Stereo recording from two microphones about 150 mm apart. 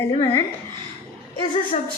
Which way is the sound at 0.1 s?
35° left (ahead or behind).